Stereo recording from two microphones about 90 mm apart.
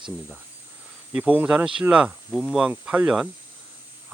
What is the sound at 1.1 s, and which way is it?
Speech, 10° right (ahead or behind).